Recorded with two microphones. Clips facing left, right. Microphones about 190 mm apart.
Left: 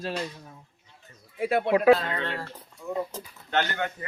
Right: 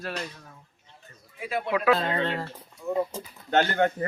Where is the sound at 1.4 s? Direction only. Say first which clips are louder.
Left 6 dB; 60° left (ahead or behind).